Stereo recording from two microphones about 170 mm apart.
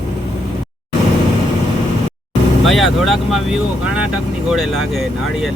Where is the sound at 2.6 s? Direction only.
Centre (ahead or behind).